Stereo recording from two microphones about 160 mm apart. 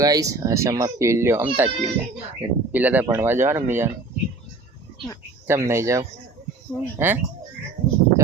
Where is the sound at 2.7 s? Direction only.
10° right (ahead or behind).